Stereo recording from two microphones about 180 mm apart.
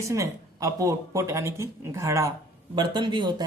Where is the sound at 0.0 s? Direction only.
15° right (ahead or behind).